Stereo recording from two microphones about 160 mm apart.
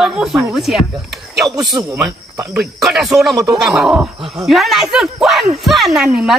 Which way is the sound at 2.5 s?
Centre (ahead or behind).